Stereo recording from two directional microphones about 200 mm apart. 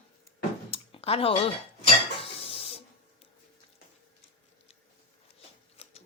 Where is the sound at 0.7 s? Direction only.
30° left (ahead or behind).